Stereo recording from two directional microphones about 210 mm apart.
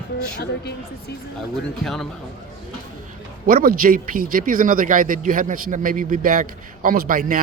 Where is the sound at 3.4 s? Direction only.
45° right (ahead or behind).